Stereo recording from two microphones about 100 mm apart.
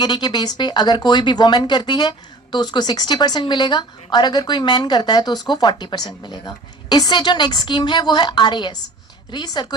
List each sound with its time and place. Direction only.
0.0 s speech: 45° left (ahead or behind)